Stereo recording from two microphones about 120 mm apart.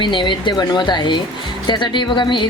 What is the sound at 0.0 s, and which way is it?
Speech, 40° left (ahead or behind).